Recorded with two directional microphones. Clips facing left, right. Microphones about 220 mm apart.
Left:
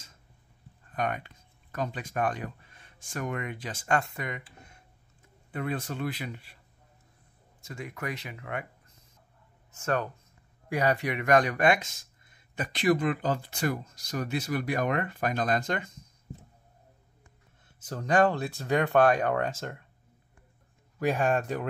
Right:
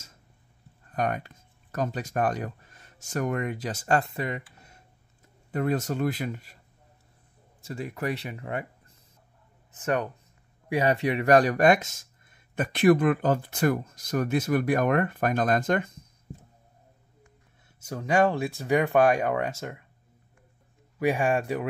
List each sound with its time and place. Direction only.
0.9 s speech: 40° right (ahead or behind)
5.5 s speech: 40° right (ahead or behind)
7.6 s speech: 35° right (ahead or behind)
9.7 s speech: 20° right (ahead or behind); by 16.1 s 55° right (ahead or behind)
17.9 s speech: 10° right (ahead or behind)
21.0 s speech: 10° right (ahead or behind)